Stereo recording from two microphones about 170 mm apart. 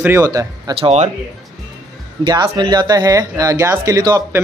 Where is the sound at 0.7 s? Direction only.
35° right (ahead or behind).